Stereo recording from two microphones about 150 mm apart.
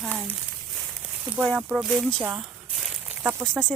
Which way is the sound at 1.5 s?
Centre (ahead or behind).